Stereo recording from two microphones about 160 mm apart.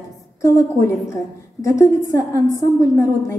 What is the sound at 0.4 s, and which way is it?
A woman's voice, 15° left (ahead or behind).